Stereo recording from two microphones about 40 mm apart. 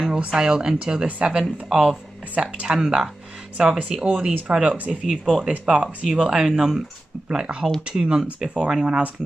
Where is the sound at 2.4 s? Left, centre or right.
Right.